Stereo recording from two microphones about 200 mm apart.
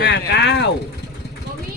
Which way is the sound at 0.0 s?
60° left (ahead or behind).